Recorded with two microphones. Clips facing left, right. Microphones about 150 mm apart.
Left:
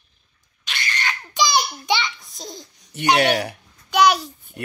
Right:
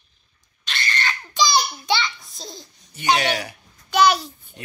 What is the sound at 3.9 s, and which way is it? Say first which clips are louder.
Speech: left 1 dB; 10° left (ahead or behind).